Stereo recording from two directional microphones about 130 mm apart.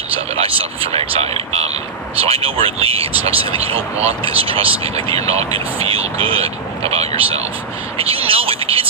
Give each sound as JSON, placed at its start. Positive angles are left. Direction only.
{"t": 0.3, "sound": "speech", "side_deg": -45}